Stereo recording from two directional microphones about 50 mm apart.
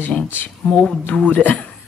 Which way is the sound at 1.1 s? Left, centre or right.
Left.